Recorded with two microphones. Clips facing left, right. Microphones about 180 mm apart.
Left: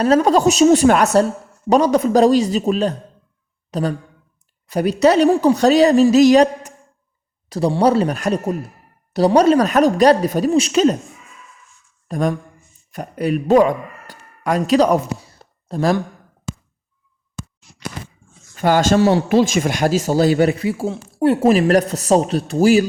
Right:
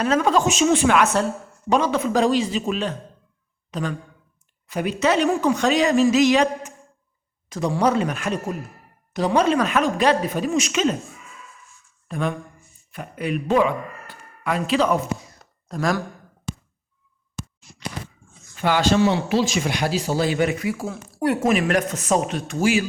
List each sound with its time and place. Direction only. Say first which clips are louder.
0.0 s speech: left 6 dB; 35° left (ahead or behind)
12.0 s speech: left 6 dB; 40° left (ahead or behind)
18.5 s speech: left 4 dB; 45° left (ahead or behind)